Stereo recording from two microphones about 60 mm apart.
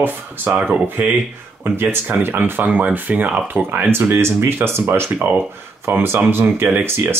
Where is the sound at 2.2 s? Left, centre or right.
Right.